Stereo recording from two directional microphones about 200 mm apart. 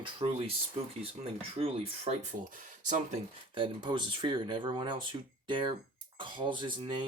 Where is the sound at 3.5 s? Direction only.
25° right (ahead or behind).